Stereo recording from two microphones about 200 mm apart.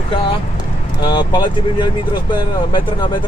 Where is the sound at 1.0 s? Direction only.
20° left (ahead or behind).